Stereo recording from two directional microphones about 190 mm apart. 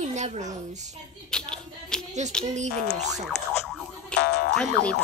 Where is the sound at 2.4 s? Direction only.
40° right (ahead or behind).